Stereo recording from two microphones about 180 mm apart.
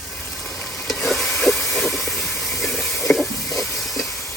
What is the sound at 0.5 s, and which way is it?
Vehicle, centre (ahead or behind).